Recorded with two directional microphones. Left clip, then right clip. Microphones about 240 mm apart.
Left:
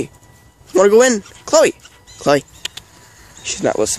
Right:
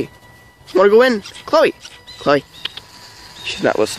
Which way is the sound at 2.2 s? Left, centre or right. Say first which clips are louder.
Left 1 dB; centre.